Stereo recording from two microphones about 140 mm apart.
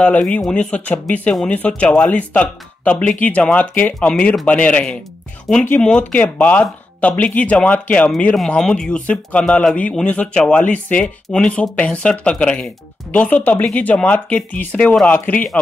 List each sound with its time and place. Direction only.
0.0 s speech: 10° left (ahead or behind)